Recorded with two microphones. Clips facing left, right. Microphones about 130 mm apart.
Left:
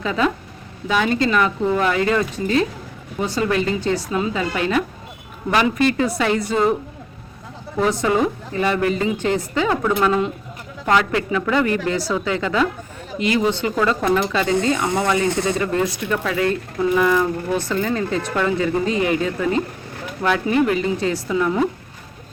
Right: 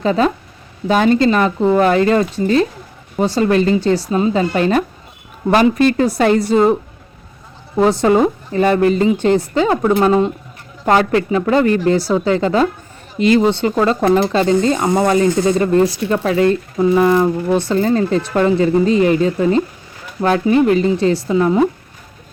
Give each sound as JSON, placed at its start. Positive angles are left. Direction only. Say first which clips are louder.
{"t": 0.0, "sound": "speech", "louder": "right 5 dB", "side_deg": -35}
{"t": 7.8, "sound": "speech", "louder": "right 6 dB", "side_deg": -35}